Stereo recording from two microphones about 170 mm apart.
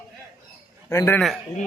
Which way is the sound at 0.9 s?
15° left (ahead or behind).